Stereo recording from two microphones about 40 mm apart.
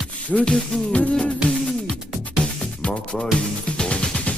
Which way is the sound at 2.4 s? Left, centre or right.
Left.